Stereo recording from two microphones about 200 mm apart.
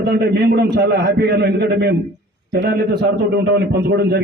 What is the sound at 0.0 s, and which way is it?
A man's voice, 55° right (ahead or behind).